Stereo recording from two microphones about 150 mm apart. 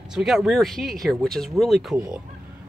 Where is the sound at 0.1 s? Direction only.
5° right (ahead or behind).